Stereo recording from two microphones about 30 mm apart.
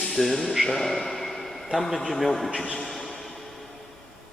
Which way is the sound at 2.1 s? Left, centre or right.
Centre.